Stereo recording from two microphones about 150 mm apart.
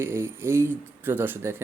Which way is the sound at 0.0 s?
15° right (ahead or behind).